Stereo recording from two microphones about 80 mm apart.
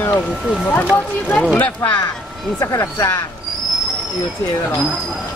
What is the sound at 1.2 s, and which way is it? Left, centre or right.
Speech, centre.